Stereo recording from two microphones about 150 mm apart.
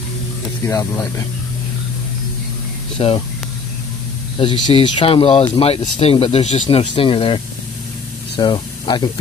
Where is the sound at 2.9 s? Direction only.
40° left (ahead or behind).